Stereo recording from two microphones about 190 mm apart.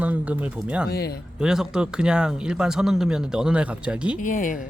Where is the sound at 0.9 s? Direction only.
55° left (ahead or behind).